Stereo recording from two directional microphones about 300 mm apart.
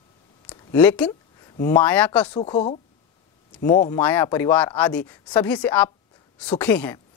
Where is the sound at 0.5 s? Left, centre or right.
Centre.